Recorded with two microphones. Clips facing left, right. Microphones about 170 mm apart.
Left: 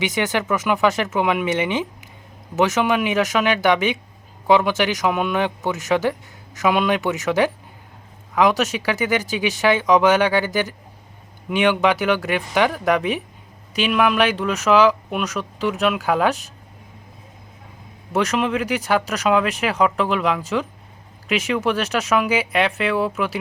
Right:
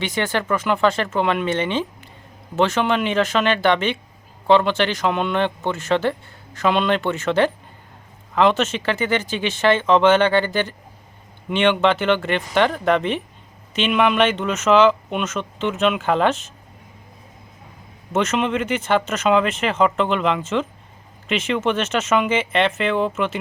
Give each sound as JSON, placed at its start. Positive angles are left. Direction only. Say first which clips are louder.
{"t": 0.0, "sound": "speech", "louder": "left 1 dB", "side_deg": 15}
{"t": 18.1, "sound": "speech", "louder": "even", "side_deg": 0}